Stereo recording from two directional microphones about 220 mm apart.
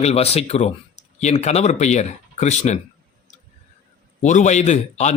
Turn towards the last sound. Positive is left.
turn(degrees=30)  # may be behind; listen again after turning